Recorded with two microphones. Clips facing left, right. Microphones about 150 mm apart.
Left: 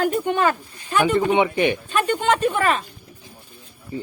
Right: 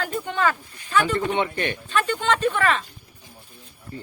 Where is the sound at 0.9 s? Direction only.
15° left (ahead or behind).